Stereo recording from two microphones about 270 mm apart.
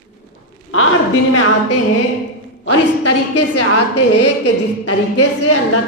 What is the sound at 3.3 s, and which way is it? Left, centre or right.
A woman's voice, left.